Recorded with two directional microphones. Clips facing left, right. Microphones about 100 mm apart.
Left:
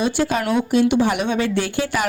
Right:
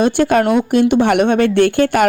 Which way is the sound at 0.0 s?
55° right (ahead or behind).